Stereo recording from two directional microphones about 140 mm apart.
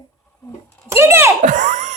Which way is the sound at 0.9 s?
15° right (ahead or behind).